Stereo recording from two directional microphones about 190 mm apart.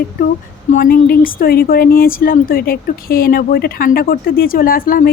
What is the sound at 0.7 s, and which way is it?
A woman's voice, 45° left (ahead or behind).